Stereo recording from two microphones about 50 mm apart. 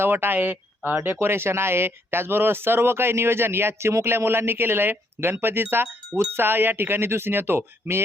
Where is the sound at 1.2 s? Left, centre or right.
Right.